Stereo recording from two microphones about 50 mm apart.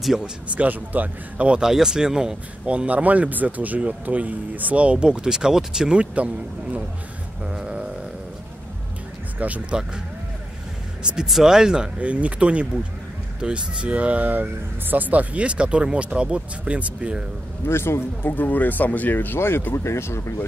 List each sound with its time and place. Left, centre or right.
0.0 s speech: centre
0.6 s speech: right
1.7 s speech: centre; by 4.9 s right
4.9 s speech: centre
6.1 s speech: right
7.4 s a sound: centre
9.4 s speech: right
11.2 s speech: centre
12.0 s speech: right
17.6 s a man's voice: left
18.3 s speech: left